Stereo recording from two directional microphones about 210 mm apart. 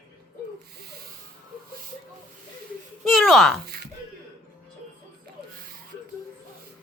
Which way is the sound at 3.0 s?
Centre (ahead or behind).